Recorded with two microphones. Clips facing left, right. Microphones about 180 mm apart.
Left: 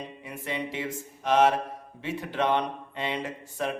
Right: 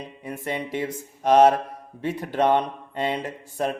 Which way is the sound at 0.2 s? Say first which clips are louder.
Right 5 dB; 45° right (ahead or behind).